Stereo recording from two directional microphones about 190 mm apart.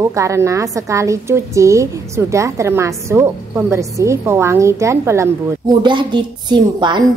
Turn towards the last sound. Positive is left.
turn(degrees=-25)  # may be behind; listen again after turning